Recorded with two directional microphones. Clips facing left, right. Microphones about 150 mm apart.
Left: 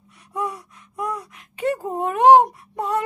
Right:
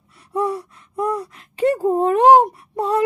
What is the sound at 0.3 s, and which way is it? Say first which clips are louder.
Gasp: right 6 dB; 30° right (ahead or behind).